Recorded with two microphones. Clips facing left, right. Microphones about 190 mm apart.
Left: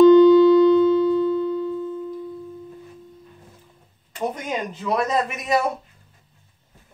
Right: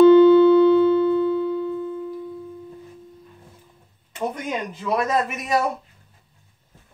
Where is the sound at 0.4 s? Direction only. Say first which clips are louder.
Even; 60° right (ahead or behind).